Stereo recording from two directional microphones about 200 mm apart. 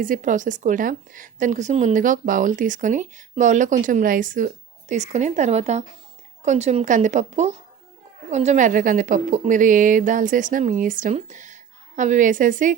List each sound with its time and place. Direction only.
0.0 s a woman's voice: 40° right (ahead or behind)